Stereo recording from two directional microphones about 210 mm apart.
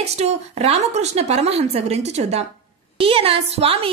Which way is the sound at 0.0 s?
30° right (ahead or behind).